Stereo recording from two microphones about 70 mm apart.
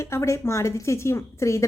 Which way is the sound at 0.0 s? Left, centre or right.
Left.